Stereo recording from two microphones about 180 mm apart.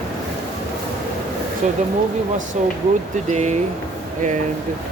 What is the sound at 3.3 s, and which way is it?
Speech, 40° right (ahead or behind).